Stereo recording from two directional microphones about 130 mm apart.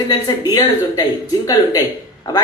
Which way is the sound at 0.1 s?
30° left (ahead or behind).